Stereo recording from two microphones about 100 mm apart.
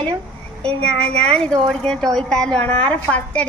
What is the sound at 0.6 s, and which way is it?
A woman's voice, 10° left (ahead or behind).